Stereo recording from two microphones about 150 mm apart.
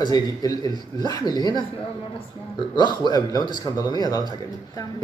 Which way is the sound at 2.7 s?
30° left (ahead or behind).